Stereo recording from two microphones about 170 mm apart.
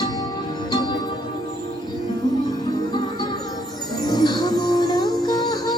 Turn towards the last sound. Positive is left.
turn(degrees=25)  # may be behind; listen again after turning